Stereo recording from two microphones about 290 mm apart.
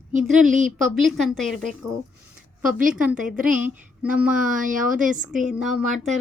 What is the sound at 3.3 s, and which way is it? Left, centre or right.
A woman's voice, centre.